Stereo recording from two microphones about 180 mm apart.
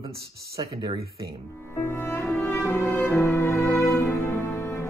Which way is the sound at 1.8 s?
15° left (ahead or behind).